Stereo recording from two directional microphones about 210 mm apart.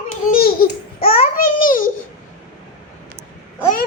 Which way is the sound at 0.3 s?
45° left (ahead or behind).